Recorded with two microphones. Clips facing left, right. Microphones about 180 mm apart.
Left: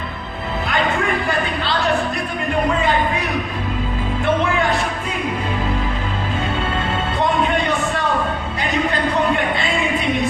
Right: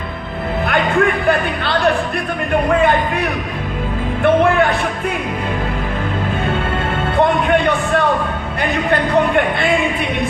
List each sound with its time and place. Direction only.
4.2 s music: 60° right (ahead or behind)
7.2 s music: 60° right (ahead or behind)
8.9 s a sound: 55° right (ahead or behind)